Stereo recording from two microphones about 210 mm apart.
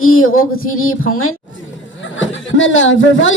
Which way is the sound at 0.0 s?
80° left.